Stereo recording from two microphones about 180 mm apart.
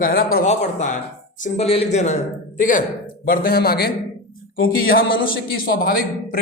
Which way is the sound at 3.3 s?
55° left (ahead or behind).